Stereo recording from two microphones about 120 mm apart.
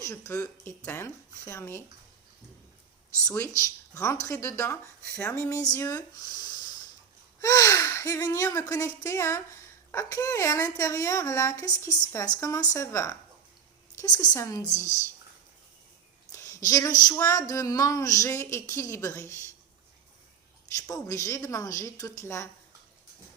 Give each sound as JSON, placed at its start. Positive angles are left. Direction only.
{"t": 0.0, "sound": "a woman's voice", "side_deg": 25}
{"t": 3.3, "sound": "a woman's voice", "side_deg": 25}
{"t": 7.4, "sound": "a woman's voice", "side_deg": 25}
{"t": 16.3, "sound": "a woman's voice", "side_deg": 25}
{"t": 20.7, "sound": "a woman's voice", "side_deg": 30}